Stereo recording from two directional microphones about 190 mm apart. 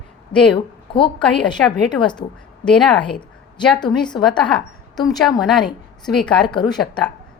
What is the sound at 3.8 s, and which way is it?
Speech, 25° left (ahead or behind).